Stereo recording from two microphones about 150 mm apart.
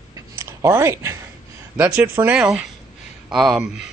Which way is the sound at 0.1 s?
20° right (ahead or behind).